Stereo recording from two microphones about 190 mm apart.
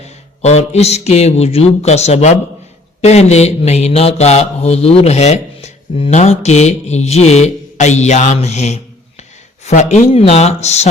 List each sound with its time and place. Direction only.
0.0 s speech: 35° left (ahead or behind)